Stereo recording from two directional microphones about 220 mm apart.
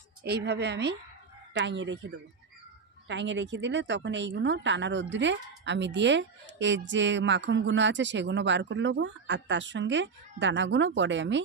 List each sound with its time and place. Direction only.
0.2 s a woman's voice: 50° right (ahead or behind)